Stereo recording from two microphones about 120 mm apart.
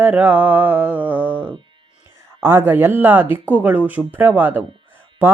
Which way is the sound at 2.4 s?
20° right (ahead or behind).